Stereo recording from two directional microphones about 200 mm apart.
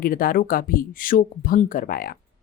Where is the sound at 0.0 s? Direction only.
45° left (ahead or behind).